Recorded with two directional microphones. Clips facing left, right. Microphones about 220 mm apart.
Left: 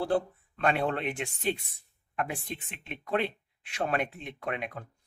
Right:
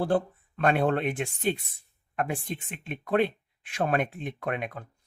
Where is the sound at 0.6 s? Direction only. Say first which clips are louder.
Right 4 dB; 50° right (ahead or behind).